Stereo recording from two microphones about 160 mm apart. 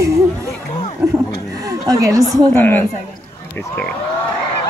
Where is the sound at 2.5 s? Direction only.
15° left (ahead or behind).